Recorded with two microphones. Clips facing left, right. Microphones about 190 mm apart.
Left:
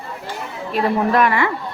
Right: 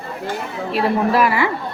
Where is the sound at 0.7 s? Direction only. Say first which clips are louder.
Even; 5° right (ahead or behind).